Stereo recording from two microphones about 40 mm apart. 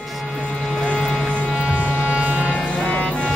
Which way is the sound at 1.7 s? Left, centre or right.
Right.